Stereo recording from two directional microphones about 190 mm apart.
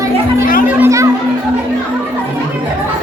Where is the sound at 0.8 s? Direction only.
15° right (ahead or behind).